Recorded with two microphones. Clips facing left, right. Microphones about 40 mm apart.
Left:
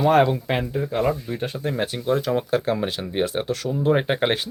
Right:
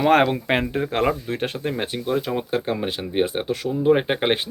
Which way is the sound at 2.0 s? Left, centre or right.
Centre.